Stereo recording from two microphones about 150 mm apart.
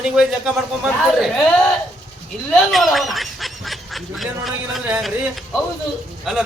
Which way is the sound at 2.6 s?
Centre (ahead or behind).